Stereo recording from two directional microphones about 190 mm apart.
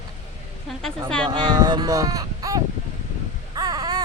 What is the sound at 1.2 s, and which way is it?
Speech, 25° right (ahead or behind).